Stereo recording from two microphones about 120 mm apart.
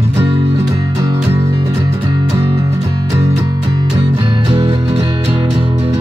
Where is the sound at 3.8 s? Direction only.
40° right (ahead or behind).